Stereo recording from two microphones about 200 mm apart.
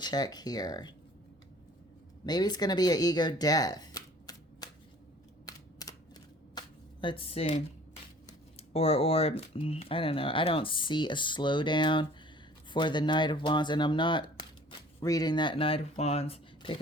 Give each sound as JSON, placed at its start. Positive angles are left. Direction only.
{"t": 0.0, "sound": "speech", "side_deg": 20}
{"t": 2.2, "sound": "speech", "side_deg": 20}
{"t": 5.8, "sound": "typewriter", "side_deg": 20}
{"t": 6.5, "sound": "finger snapping", "side_deg": 20}
{"t": 8.7, "sound": "speech", "side_deg": 30}